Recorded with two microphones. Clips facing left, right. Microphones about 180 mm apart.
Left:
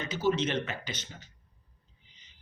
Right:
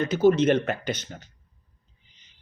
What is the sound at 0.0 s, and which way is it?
Speech, 55° right (ahead or behind).